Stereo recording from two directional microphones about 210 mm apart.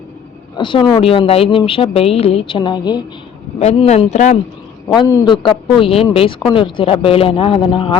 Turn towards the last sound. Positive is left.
turn(degrees=25)  # may be behind; listen again after turning